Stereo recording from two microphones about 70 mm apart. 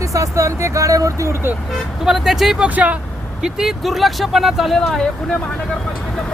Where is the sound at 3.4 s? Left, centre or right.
Centre.